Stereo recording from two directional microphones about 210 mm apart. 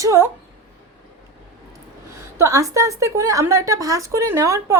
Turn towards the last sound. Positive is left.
turn(degrees=-15)  # may be behind; listen again after turning